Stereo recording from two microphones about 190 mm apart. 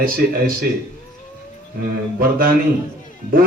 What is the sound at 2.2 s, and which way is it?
Speech, 50° right (ahead or behind).